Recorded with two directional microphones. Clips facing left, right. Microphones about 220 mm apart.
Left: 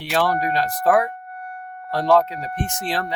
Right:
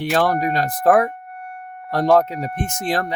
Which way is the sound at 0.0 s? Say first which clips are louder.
Right 3 dB; 45° right (ahead or behind).